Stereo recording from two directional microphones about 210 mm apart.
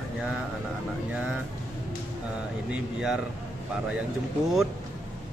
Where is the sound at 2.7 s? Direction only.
5° right (ahead or behind).